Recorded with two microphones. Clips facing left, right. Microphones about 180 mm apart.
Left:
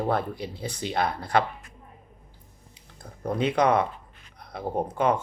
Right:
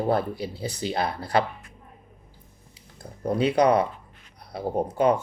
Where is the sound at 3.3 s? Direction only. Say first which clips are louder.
Right 2 dB; 35° right (ahead or behind).